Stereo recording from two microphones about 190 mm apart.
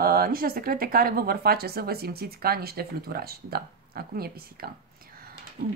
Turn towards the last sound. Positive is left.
turn(degrees=-45)  # may be behind; listen again after turning